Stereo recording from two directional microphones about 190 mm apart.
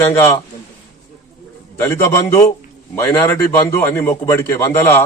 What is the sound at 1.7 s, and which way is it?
Speech, 15° left (ahead or behind).